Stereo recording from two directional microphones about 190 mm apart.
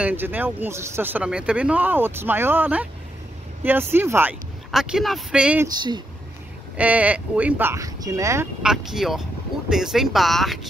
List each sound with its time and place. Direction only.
0.0 s speech: 10° right (ahead or behind)
5.8 s speech: 20° right (ahead or behind)
6.8 s speech: 5° right (ahead or behind)
8.6 s speech: centre (ahead or behind)